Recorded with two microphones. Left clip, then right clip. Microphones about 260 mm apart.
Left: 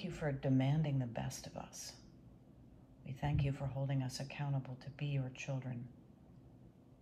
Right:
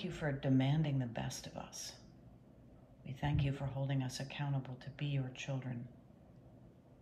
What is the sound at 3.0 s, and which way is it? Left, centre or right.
A woman's voice, centre.